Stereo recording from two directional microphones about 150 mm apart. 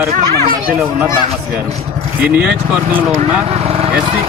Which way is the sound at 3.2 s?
40° right (ahead or behind).